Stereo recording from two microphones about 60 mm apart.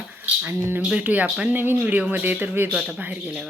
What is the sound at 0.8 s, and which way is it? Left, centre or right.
Speech, centre.